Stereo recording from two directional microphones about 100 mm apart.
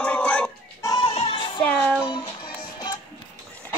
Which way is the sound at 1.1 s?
90° left.